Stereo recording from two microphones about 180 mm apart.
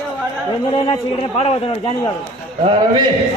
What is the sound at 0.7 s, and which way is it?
A man's voice, 30° left (ahead or behind).